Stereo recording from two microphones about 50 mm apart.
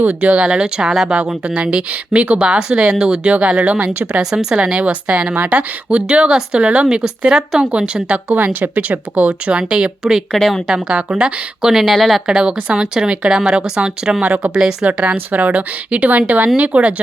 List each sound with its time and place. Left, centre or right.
0.0 s speech: right; by 4.5 s centre
4.5 s speech: right
5.4 s speech: right
5.9 s speech: right
10.2 s speech: centre
10.7 s speech: centre
11.7 s speech: centre
12.2 s speech: centre
15.1 s speech: right